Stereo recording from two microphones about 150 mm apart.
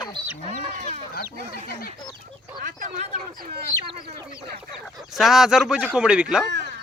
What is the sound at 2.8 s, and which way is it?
Speech, 60° right (ahead or behind).